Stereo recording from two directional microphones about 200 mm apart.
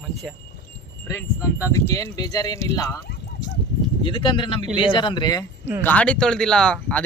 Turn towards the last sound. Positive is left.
turn(degrees=5)  # may be behind; listen again after turning